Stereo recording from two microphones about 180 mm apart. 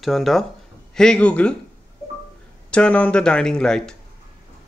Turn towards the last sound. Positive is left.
turn(degrees=5)  # may be behind; listen again after turning